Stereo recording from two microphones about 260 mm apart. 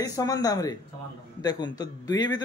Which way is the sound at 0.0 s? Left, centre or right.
Centre.